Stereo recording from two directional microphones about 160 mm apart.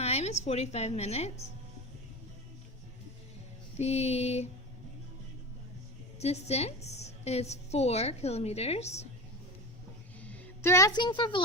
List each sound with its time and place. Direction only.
0.0 s a woman's voice: 40° left (ahead or behind)
3.8 s a woman's voice: 40° left (ahead or behind)
6.1 s a woman's voice: 40° left (ahead or behind)
10.2 s speech: 10° left (ahead or behind); by 11.4 s 30° left (ahead or behind)